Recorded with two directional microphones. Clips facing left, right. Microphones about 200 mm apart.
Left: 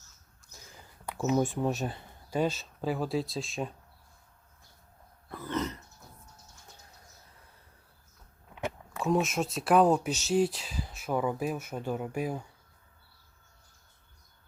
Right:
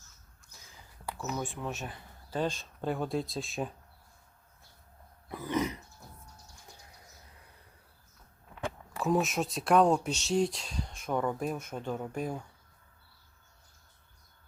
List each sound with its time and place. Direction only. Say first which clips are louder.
0.4 s a sound: left 4 dB; 35° left (ahead or behind)
1.4 s speech: left 8 dB; 40° left (ahead or behind)
2.3 s speech: left 3 dB; 10° left (ahead or behind)
5.3 s burping: right 2 dB; 15° right (ahead or behind)
9.0 s speech: left 1 dB; centre (ahead or behind)